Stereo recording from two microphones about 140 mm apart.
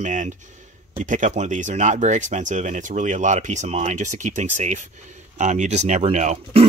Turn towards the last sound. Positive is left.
turn(degrees=-55)  # may be behind; listen again after turning